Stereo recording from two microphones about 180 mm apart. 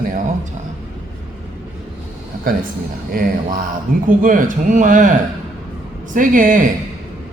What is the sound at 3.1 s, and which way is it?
A man's voice, 55° right (ahead or behind).